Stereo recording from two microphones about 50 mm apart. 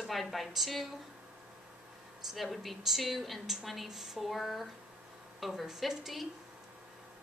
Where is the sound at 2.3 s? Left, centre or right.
Centre.